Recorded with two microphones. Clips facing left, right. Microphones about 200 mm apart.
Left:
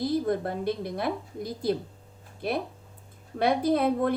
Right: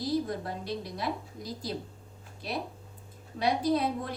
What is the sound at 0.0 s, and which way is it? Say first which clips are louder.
A woman's voice: left 4 dB; 55° left (ahead or behind).